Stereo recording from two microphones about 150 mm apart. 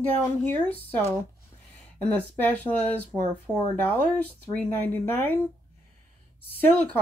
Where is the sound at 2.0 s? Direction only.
10° left (ahead or behind).